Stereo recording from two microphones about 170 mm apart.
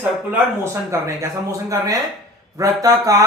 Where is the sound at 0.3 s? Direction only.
15° right (ahead or behind).